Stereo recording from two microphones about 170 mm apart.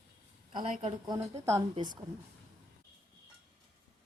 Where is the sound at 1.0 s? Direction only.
20° right (ahead or behind).